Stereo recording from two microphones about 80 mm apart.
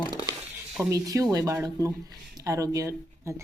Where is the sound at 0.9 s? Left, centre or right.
Right.